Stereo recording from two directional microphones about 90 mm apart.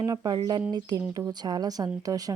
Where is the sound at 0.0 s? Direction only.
45° right (ahead or behind).